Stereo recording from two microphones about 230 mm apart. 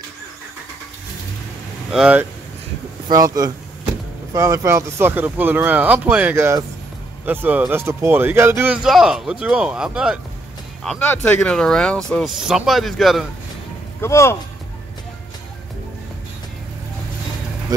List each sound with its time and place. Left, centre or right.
1.9 s speech: centre
3.1 s speech: centre
14.0 s speech: centre